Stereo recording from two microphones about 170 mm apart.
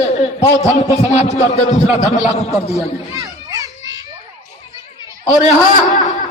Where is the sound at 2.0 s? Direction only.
20° left (ahead or behind).